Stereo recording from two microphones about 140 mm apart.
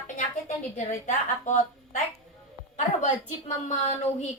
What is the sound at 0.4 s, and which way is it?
A woman's voice, 60° left (ahead or behind).